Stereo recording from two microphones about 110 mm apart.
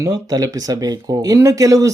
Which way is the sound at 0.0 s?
35° right (ahead or behind).